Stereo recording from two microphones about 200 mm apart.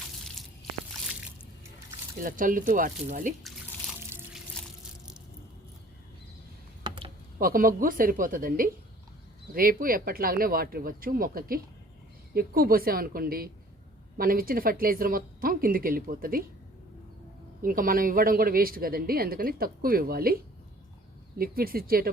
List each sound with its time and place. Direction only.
2.2 s speech: 40° right (ahead or behind)
6.8 s typing: 25° right (ahead or behind)
7.3 s speech: 45° right (ahead or behind)
17.6 s speech: 45° right (ahead or behind)